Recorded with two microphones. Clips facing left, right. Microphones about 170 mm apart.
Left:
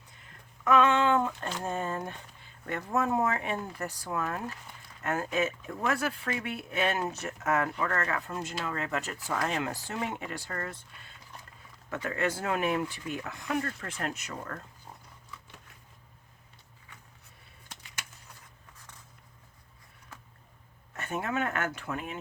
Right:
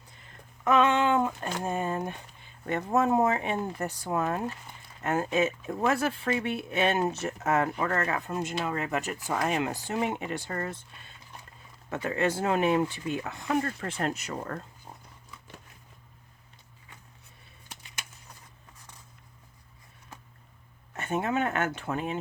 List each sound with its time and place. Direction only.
0.6 s speech: 20° right (ahead or behind)
11.9 s speech: 25° right (ahead or behind)
20.9 s speech: 20° right (ahead or behind)